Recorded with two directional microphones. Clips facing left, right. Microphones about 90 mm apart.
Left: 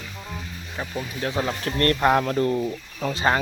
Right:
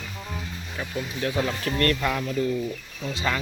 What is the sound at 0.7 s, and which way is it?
Speech, 25° left (ahead or behind).